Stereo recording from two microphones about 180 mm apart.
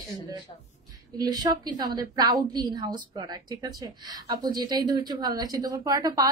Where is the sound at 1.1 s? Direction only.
20° right (ahead or behind).